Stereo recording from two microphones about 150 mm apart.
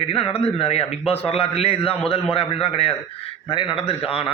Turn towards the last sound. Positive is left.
turn(degrees=40)  # may be behind; listen again after turning